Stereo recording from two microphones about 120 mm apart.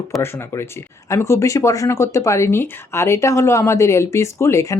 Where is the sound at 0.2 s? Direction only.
20° left (ahead or behind).